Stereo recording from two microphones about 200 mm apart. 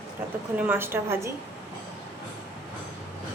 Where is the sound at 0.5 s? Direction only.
5° right (ahead or behind).